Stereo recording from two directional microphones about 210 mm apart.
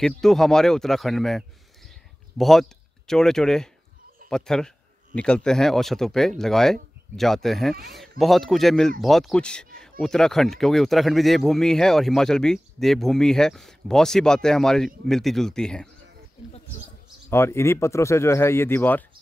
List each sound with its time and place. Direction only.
0.0 s a man's voice: centre (ahead or behind)
17.3 s speech: 10° left (ahead or behind)